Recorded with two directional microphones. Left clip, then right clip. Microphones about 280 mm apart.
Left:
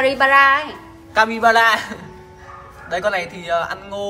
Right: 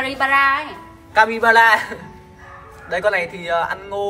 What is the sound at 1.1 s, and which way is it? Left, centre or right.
Speech, centre.